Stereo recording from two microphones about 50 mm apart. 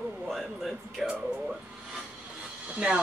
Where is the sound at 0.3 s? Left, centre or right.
Centre.